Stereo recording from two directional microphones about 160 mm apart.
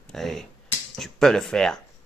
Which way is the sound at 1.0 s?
Centre (ahead or behind).